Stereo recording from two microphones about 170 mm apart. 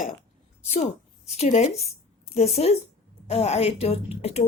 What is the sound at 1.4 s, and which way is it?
Speech, 45° left (ahead or behind).